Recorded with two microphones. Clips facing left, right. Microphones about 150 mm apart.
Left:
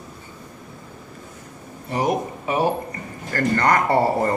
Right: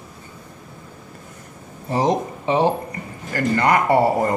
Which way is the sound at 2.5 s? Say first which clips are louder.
Right 3 dB; 25° right (ahead or behind).